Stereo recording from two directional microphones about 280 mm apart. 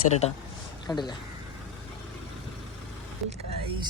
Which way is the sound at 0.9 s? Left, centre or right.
Centre.